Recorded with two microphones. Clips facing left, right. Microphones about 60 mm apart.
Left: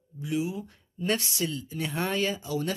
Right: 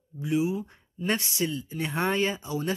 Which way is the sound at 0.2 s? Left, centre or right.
Centre.